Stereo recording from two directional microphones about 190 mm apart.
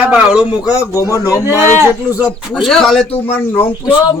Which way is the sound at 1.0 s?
15° left (ahead or behind).